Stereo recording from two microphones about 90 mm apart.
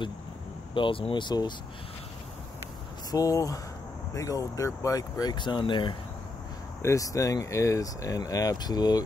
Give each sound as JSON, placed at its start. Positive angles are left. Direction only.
{"t": 0.7, "sound": "speech", "side_deg": 80}
{"t": 3.1, "sound": "speech", "side_deg": 40}
{"t": 6.8, "sound": "speech", "side_deg": 35}